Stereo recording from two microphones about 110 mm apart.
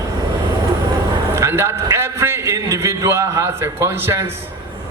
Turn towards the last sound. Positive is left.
turn(degrees=-25)  # may be behind; listen again after turning